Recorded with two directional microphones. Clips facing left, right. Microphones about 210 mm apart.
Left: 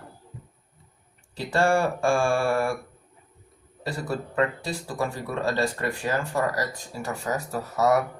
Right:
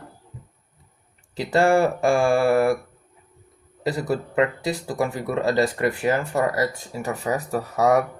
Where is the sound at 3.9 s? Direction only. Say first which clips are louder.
Right 6 dB; 20° right (ahead or behind).